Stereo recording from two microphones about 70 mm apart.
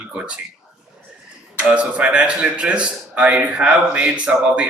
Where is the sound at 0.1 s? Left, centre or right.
Centre.